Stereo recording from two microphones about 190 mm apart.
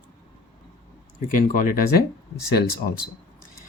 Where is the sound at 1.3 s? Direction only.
45° left (ahead or behind).